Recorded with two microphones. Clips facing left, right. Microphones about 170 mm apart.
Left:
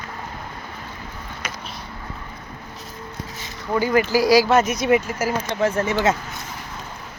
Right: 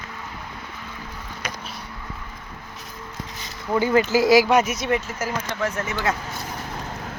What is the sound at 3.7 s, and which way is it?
Speech, 20° right (ahead or behind).